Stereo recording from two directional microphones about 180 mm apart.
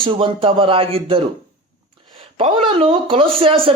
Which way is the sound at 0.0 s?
30° right (ahead or behind).